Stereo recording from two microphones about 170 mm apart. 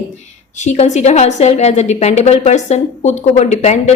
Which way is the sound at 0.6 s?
40° left (ahead or behind).